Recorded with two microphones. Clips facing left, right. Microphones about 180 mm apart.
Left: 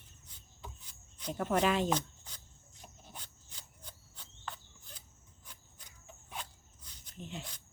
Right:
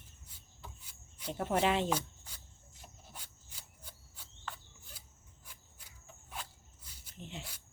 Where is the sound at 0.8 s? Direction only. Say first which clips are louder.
Left 1 dB; 10° right (ahead or behind).